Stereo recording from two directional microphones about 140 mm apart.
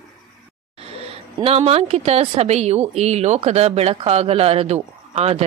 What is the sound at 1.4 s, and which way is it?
Speech, 45° right (ahead or behind).